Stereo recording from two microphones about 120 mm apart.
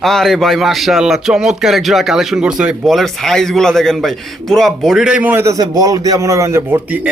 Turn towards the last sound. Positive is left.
turn(degrees=-15)  # may be behind; listen again after turning